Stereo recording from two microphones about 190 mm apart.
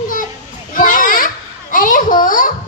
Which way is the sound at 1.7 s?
45° left (ahead or behind).